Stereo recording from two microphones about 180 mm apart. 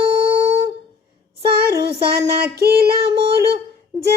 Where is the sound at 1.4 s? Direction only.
60° right (ahead or behind).